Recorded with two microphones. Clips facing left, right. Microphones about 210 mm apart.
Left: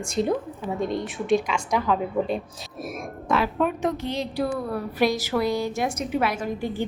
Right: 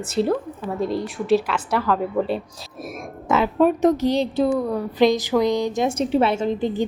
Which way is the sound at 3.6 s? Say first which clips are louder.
Right 8 dB; 40° right (ahead or behind).